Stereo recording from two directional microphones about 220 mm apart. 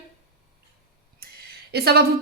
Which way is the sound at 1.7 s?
45° right (ahead or behind).